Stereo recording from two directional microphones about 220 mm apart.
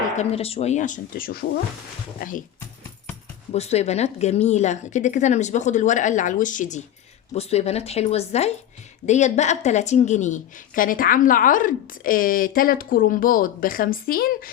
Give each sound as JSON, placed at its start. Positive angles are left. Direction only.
{"t": 0.2, "sound": "a woman's voice", "side_deg": 25}
{"t": 3.5, "sound": "a woman's voice", "side_deg": 30}